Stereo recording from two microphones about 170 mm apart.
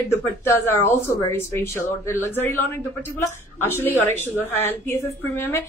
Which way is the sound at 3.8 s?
15° left (ahead or behind).